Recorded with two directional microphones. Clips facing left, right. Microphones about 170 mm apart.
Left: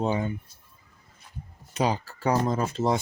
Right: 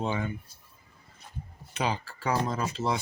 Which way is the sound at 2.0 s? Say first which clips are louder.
Left 4 dB; 40° left (ahead or behind).